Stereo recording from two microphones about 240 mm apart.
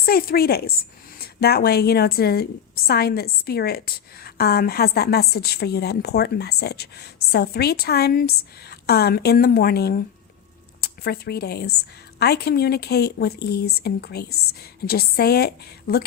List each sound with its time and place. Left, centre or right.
0.0 s a woman's voice: left